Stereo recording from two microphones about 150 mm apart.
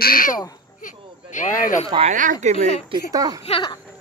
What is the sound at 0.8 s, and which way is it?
Speech, 60° left (ahead or behind).